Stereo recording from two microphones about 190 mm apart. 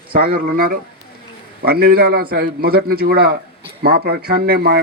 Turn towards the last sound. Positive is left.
turn(degrees=-55)  # may be behind; listen again after turning